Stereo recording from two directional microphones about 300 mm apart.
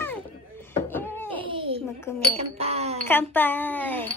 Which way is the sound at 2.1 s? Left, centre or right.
Centre.